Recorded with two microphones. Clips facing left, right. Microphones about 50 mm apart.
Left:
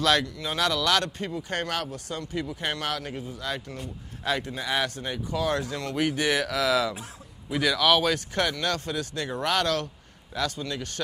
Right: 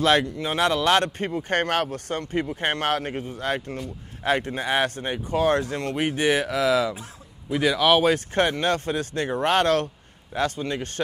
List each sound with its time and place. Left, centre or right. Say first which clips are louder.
0.0 s speech: right 4 dB; right